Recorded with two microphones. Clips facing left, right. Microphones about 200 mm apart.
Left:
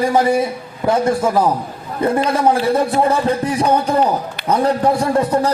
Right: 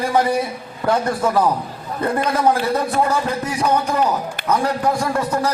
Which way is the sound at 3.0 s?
30° left (ahead or behind).